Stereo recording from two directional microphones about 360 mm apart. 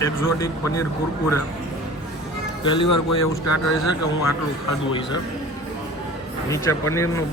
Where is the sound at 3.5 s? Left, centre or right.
Left.